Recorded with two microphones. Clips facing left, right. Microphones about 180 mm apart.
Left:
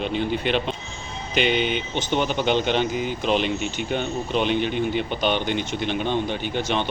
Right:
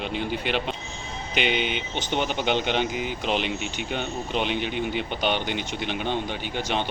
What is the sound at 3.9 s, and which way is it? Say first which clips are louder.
Speech: left 4 dB; 15° right (ahead or behind).